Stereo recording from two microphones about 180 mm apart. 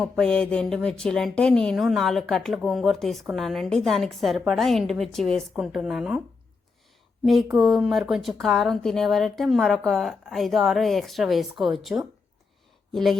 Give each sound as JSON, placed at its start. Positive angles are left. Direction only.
{"t": 0.0, "sound": "a woman's voice", "side_deg": 5}
{"t": 7.5, "sound": "a woman's voice", "side_deg": 0}